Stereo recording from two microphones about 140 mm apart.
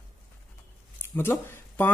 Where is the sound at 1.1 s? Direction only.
15° left (ahead or behind).